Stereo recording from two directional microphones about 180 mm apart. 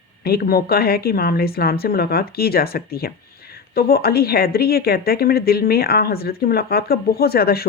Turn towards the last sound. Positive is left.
turn(degrees=60)  # may be behind; listen again after turning